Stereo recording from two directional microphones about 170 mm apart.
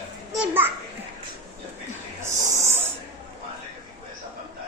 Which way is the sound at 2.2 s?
15° right (ahead or behind).